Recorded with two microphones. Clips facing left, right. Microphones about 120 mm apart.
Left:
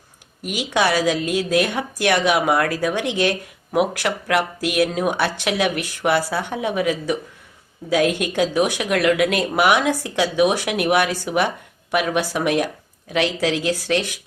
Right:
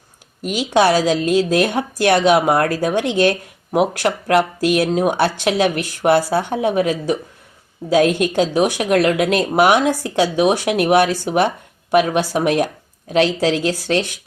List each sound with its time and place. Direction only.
0.5 s speech: 30° right (ahead or behind)
8.3 s speech: 30° right (ahead or behind)